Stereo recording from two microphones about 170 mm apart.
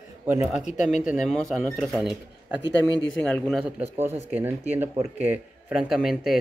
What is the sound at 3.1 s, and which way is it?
Speech, 5° left (ahead or behind).